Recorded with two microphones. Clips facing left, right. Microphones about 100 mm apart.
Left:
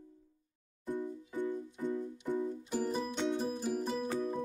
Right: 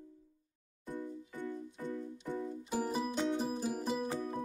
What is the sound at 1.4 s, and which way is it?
Music, 20° left (ahead or behind).